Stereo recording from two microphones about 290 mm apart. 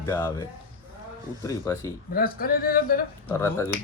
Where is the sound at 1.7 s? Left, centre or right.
Centre.